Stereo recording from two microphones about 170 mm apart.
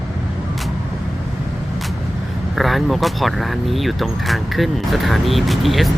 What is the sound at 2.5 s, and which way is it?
Speech, centre (ahead or behind).